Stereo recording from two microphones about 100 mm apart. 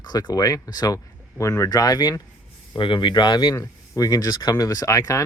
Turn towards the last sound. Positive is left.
turn(degrees=35)  # may be behind; listen again after turning